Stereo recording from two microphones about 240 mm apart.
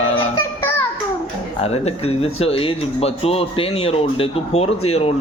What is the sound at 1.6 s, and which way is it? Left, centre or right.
Speech, left.